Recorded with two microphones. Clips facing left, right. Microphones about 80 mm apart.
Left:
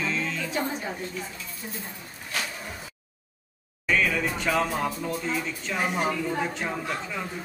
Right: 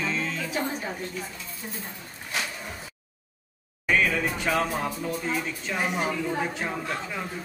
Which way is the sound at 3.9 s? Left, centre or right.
Centre.